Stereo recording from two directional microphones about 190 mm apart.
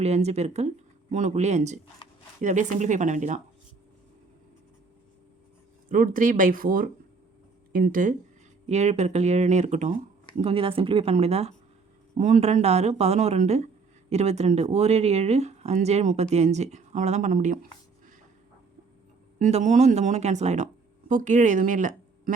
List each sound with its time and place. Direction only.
0.0 s speech: 35° right (ahead or behind)
5.9 s speech: 45° right (ahead or behind)
8.7 s speech: 35° right (ahead or behind)
19.4 s speech: 35° right (ahead or behind)